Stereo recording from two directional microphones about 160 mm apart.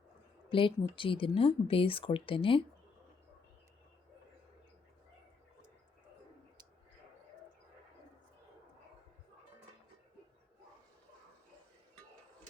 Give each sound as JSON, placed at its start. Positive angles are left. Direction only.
{"t": 0.5, "sound": "speech", "side_deg": 30}